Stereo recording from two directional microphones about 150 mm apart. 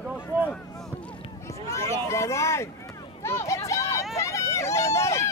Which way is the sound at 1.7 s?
20° left (ahead or behind).